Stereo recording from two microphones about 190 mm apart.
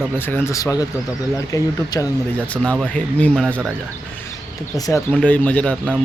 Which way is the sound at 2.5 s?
5° left (ahead or behind).